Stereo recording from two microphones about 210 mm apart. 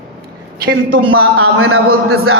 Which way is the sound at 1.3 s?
85° right.